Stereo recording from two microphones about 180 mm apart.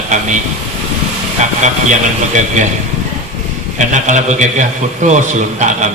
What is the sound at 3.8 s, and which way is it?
A man's voice, 45° right (ahead or behind).